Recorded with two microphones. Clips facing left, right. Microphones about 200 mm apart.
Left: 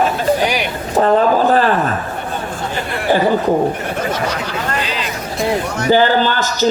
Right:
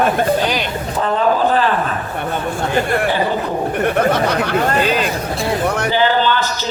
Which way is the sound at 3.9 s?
60° right (ahead or behind).